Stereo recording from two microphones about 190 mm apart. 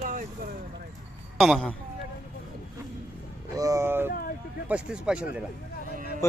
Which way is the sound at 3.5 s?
15° right (ahead or behind).